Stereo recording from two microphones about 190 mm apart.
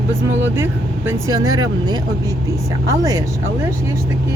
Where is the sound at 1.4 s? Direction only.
90° right.